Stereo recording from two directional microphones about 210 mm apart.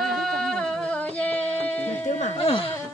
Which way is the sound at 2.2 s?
30° left (ahead or behind).